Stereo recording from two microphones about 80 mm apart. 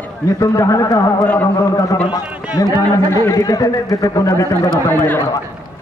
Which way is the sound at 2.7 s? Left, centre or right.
Left.